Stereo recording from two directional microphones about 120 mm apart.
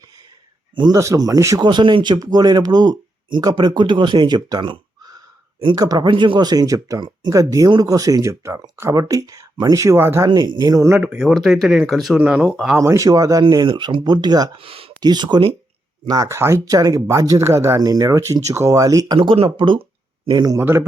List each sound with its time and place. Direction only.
0.9 s speech: 25° right (ahead or behind)
1.6 s speech: 40° right (ahead or behind)
6.1 s speech: 45° right (ahead or behind); by 10.2 s 20° right (ahead or behind)
10.2 s speech: 40° right (ahead or behind)
11.0 s speech: 5° right (ahead or behind)
12.7 s speech: 25° right (ahead or behind)
13.4 s speech: 40° right (ahead or behind)
14.6 s speech: 50° right (ahead or behind)
15.0 s speech: 35° right (ahead or behind)
19.1 s speech: 45° right (ahead or behind)
20.6 s speech: 20° right (ahead or behind)